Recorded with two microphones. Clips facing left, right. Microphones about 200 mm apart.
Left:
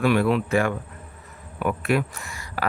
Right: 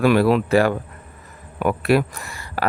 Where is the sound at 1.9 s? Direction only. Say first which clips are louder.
Right 6 dB; 75° right (ahead or behind).